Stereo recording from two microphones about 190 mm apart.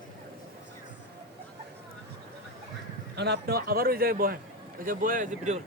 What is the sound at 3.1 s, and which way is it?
A man's voice, 60° right (ahead or behind).